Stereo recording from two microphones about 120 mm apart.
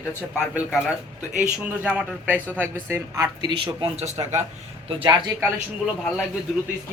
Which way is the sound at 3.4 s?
40° right (ahead or behind).